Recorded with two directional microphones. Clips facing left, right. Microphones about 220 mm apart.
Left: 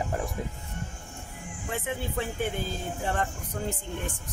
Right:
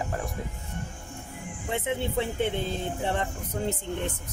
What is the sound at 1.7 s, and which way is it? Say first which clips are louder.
Speech: right 4 dB; 20° right (ahead or behind).